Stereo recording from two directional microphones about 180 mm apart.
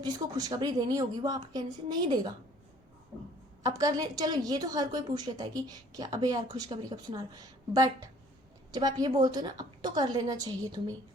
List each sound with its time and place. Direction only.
0.0 s a woman's voice: 20° right (ahead or behind)
3.6 s a woman's voice: 20° right (ahead or behind)